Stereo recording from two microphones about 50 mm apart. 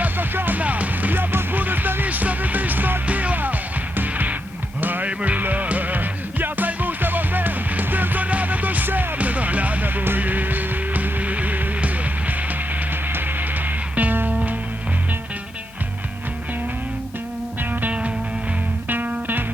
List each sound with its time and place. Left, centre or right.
0.0 s music: right
13.1 s music: right
17.6 s music: right